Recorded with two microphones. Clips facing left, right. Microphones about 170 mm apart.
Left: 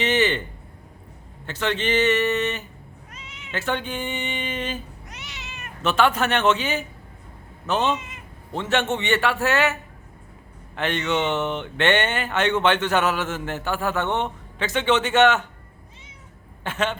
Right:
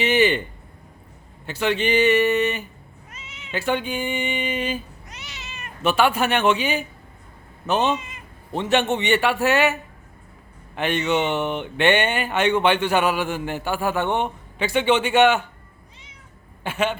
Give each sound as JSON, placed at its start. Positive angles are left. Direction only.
{"t": 0.0, "sound": "a man's voice", "side_deg": -10}
{"t": 1.5, "sound": "speech", "side_deg": -10}
{"t": 3.1, "sound": "cat", "side_deg": -5}
{"t": 5.8, "sound": "speech", "side_deg": -10}
{"t": 10.8, "sound": "speech", "side_deg": -15}
{"t": 16.6, "sound": "speech", "side_deg": -10}